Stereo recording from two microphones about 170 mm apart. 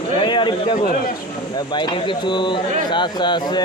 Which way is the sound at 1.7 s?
25° left (ahead or behind).